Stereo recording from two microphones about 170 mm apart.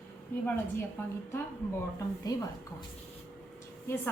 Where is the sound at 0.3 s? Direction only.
10° left (ahead or behind).